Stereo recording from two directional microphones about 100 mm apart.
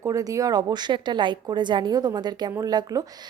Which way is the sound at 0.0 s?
35° right (ahead or behind).